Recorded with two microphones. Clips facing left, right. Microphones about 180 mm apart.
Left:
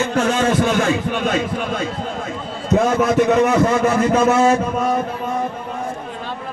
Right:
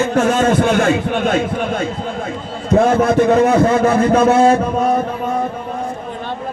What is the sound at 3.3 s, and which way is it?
Speech, 30° right (ahead or behind).